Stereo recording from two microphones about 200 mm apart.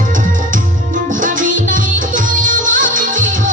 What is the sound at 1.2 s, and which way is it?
Music, 40° right (ahead or behind).